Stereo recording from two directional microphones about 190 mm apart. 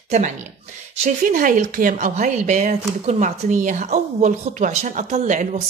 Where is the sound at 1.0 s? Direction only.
45° right (ahead or behind).